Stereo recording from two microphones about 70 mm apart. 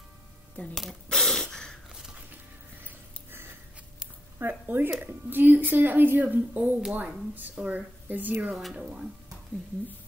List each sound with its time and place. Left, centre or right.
1.0 s snort: centre
1.9 s biting: centre
4.4 s a woman's voice: right